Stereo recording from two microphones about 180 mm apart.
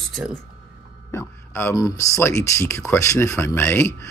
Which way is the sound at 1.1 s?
15° left (ahead or behind).